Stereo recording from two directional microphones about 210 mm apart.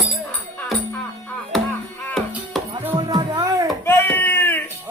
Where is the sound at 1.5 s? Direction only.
Centre (ahead or behind).